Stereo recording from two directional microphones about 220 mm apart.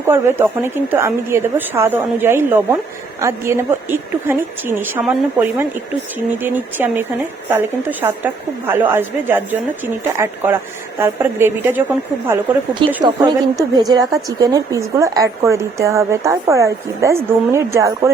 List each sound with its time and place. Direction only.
0.0 s a woman's voice: 10° right (ahead or behind)
13.0 s a woman's voice: 20° right (ahead or behind)